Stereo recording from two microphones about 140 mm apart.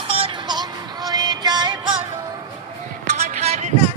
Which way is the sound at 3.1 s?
55° right (ahead or behind).